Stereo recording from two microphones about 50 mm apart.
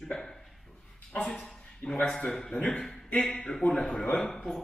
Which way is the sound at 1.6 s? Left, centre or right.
Centre.